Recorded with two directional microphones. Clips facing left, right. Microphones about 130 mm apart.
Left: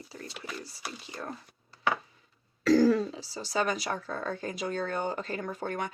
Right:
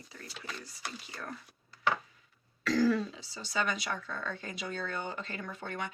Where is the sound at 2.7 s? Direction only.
40° left (ahead or behind).